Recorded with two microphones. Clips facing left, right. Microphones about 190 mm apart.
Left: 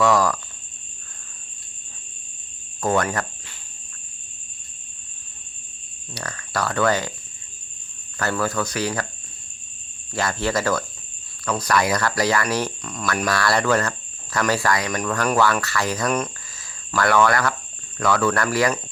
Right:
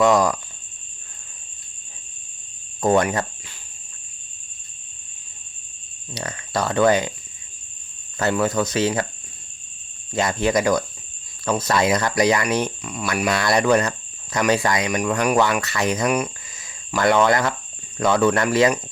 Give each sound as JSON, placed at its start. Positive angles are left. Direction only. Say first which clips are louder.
{"t": 0.0, "sound": "speech", "louder": "right 2 dB", "side_deg": -20}
{"t": 2.8, "sound": "speech", "louder": "right 3 dB", "side_deg": -20}
{"t": 6.1, "sound": "speech", "louder": "right 2 dB", "side_deg": -20}
{"t": 8.2, "sound": "speech", "louder": "right 3 dB", "side_deg": -20}
{"t": 10.1, "sound": "speech", "louder": "right 3 dB", "side_deg": -20}
{"t": 12.8, "sound": "speech", "louder": "right 1 dB", "side_deg": -10}